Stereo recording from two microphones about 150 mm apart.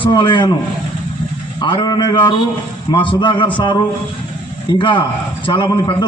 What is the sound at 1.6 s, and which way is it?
A man's voice, 30° left (ahead or behind).